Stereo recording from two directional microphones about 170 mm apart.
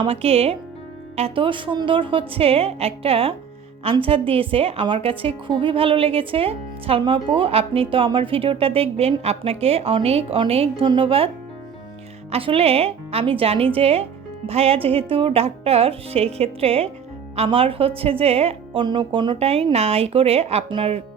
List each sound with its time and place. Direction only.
0.0 s a woman's voice: 35° right (ahead or behind)
12.3 s a woman's voice: 35° right (ahead or behind)